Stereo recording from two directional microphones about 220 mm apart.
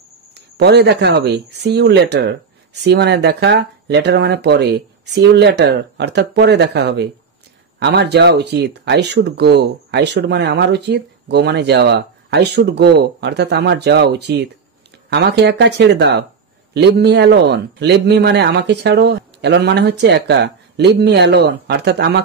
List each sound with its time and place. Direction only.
0.3 s speech: 50° right (ahead or behind)